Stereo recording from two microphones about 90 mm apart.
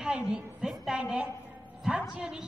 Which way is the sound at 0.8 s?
10° right (ahead or behind).